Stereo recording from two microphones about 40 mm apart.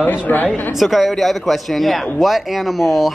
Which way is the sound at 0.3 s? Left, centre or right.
Left.